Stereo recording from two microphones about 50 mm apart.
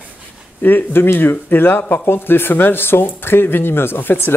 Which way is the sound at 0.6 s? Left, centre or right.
Left.